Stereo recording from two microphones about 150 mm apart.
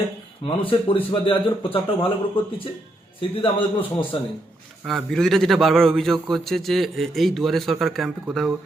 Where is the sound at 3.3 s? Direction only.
35° left (ahead or behind).